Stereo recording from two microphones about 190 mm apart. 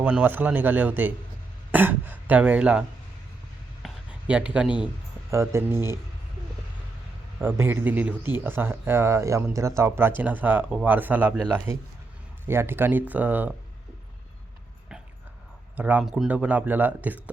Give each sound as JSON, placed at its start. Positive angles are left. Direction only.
{"t": 0.0, "sound": "speech", "side_deg": -5}
{"t": 3.8, "sound": "a sound", "side_deg": -5}
{"t": 5.3, "sound": "speech", "side_deg": -15}
{"t": 7.3, "sound": "speech", "side_deg": -10}
{"t": 15.7, "sound": "speech", "side_deg": -10}